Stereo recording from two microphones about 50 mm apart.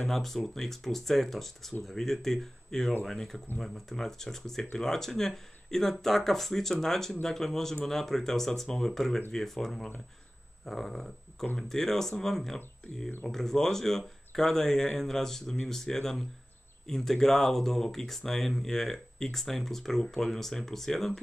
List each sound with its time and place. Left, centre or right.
0.1 s speech: centre
10.6 s a sound: centre
11.5 s speech: centre